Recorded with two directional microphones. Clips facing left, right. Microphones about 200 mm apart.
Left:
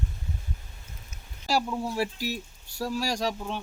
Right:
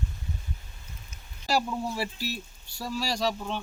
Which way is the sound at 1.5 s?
10° left (ahead or behind).